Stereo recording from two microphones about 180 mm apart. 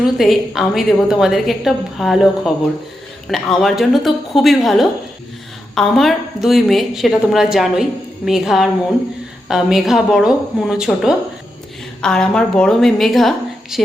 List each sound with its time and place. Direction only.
0.0 s a woman's voice: centre (ahead or behind)